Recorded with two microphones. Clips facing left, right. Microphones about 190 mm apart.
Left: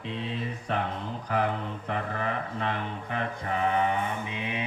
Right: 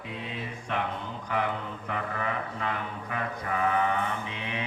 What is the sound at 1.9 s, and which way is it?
Mantra, 35° left (ahead or behind).